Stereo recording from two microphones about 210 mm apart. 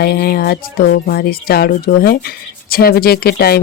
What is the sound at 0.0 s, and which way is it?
Speech, 45° left (ahead or behind).